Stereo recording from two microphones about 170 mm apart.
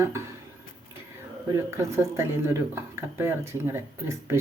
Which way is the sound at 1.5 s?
15° right (ahead or behind).